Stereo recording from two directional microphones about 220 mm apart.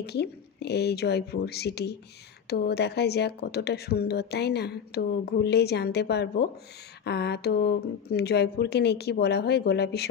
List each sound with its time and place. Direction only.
0.0 s a woman's voice: 50° left (ahead or behind)